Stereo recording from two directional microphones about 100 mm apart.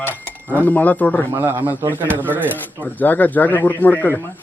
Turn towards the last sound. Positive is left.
turn(degrees=20)  # may be behind; listen again after turning